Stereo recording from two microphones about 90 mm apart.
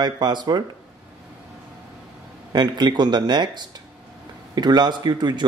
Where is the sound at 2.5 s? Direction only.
50° right (ahead or behind).